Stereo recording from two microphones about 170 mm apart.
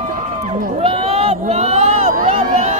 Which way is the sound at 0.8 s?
35° right (ahead or behind).